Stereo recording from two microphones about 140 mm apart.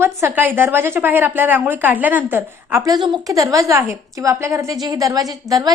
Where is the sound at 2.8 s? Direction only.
30° right (ahead or behind).